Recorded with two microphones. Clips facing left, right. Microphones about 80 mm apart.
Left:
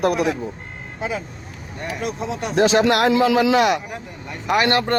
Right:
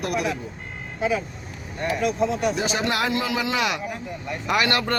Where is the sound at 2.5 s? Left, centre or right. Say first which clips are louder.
Left 9 dB; left.